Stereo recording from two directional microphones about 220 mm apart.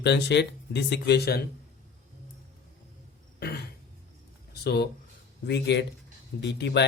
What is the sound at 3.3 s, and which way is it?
Throat clearing, 45° left (ahead or behind).